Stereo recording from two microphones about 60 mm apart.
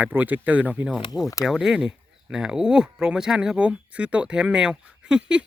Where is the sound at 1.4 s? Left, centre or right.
Centre.